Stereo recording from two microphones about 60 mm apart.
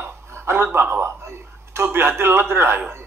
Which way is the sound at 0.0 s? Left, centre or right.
Right.